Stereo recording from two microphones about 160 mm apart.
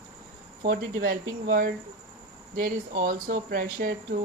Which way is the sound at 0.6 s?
60° right (ahead or behind).